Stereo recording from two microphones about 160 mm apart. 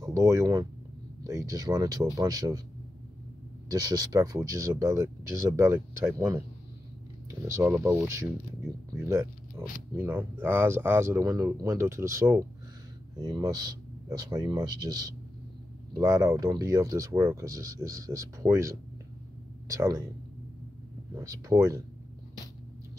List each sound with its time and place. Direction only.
0.0 s speech: 20° right (ahead or behind)
3.6 s speech: 25° right (ahead or behind)
7.2 s a sound: 15° right (ahead or behind)
7.8 s speech: 20° right (ahead or behind)
21.1 s speech: 20° right (ahead or behind)